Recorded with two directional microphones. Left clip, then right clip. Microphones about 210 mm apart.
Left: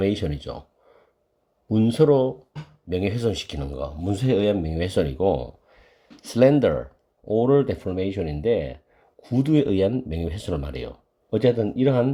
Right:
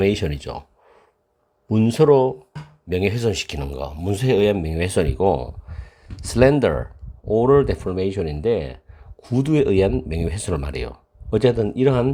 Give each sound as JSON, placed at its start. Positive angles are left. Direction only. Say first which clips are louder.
{"t": 0.0, "sound": "speech", "louder": "right 4 dB", "side_deg": -25}
{"t": 1.6, "sound": "speech", "louder": "right 3 dB", "side_deg": -25}